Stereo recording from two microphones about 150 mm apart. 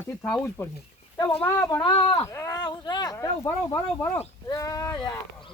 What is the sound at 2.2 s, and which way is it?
Speech, 20° left (ahead or behind).